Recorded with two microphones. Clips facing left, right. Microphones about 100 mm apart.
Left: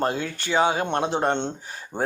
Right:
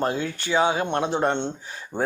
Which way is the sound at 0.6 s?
40° left (ahead or behind).